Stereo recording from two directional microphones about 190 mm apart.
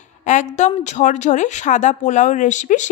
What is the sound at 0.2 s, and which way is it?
A woman's voice, 40° left (ahead or behind).